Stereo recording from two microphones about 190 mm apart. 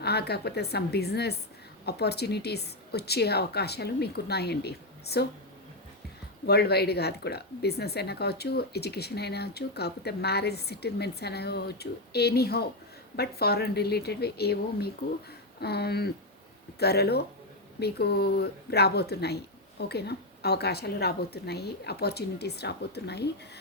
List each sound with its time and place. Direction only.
0.0 s a woman's voice: 60° left (ahead or behind)
6.4 s a woman's voice: 55° left (ahead or behind)